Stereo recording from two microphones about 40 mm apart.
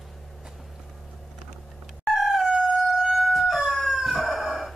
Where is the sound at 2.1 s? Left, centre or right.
Centre.